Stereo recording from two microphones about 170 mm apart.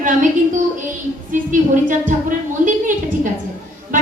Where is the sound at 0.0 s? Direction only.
50° right (ahead or behind).